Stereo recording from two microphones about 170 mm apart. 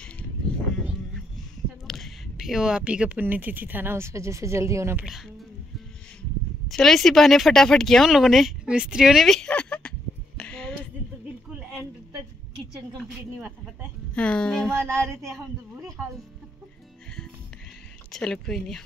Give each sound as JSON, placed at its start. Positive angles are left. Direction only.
{"t": 1.9, "sound": "speech", "side_deg": 0}
{"t": 6.7, "sound": "speech", "side_deg": 0}
{"t": 14.1, "sound": "speech", "side_deg": 5}
{"t": 14.7, "sound": "music", "side_deg": -15}
{"t": 18.1, "sound": "speech", "side_deg": 0}